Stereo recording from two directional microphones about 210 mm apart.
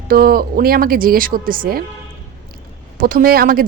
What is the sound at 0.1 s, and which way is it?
Speech, 45° right (ahead or behind).